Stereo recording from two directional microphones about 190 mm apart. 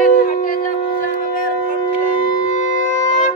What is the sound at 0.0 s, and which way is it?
Howl, 45° left (ahead or behind).